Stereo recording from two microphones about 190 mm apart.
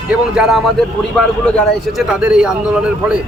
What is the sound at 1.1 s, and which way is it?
Speech, 5° left (ahead or behind).